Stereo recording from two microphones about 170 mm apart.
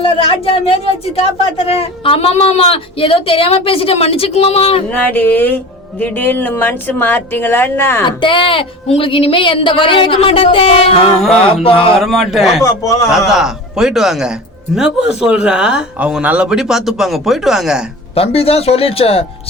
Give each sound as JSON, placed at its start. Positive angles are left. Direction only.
{"t": 0.0, "sound": "speech", "side_deg": 35}
{"t": 4.9, "sound": "speech", "side_deg": 10}
{"t": 8.0, "sound": "speech", "side_deg": 30}
{"t": 11.9, "sound": "a man's voice", "side_deg": 0}
{"t": 12.6, "sound": "a man's voice", "side_deg": 20}
{"t": 13.1, "sound": "a man's voice", "side_deg": -5}
{"t": 18.1, "sound": "speech", "side_deg": 35}